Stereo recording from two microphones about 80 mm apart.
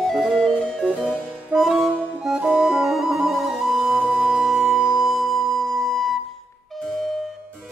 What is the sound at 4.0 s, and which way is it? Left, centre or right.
Music, right.